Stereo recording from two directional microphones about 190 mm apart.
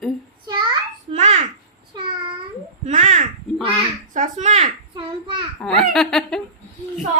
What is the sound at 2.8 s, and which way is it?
Speech, 40° right (ahead or behind).